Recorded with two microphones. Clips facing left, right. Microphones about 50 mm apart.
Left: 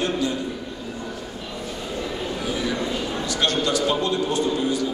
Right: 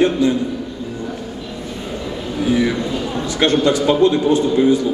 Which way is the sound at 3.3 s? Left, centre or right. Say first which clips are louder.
Right 8 dB; right.